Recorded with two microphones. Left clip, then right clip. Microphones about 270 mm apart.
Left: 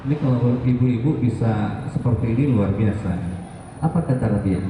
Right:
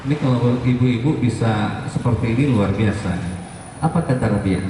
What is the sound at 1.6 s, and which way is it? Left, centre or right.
A man's voice, centre.